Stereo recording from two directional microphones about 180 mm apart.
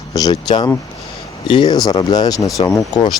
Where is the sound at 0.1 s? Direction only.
20° left (ahead or behind).